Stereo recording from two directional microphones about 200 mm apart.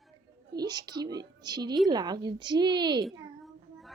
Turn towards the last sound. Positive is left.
turn(degrees=-20)  # may be behind; listen again after turning